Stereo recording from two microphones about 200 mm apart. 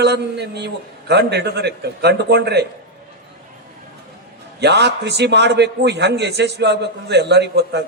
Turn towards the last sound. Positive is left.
turn(degrees=-60)  # may be behind; listen again after turning